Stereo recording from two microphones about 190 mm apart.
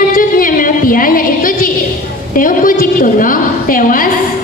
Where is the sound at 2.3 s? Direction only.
45° left (ahead or behind).